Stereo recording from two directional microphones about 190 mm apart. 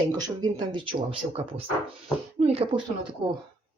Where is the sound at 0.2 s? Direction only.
20° right (ahead or behind).